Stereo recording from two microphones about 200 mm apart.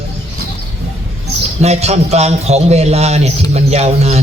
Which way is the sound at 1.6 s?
30° right (ahead or behind).